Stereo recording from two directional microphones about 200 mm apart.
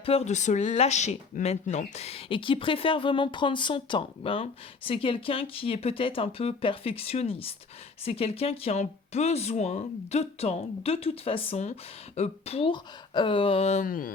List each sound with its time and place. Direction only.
0.0 s speech: 30° left (ahead or behind)